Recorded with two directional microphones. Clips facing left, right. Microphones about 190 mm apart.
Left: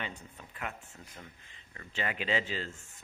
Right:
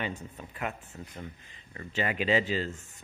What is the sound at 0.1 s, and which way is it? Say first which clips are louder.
Speech: right 8 dB; 35° right (ahead or behind).